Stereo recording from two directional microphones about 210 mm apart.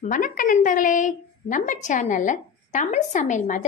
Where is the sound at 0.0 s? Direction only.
40° left (ahead or behind).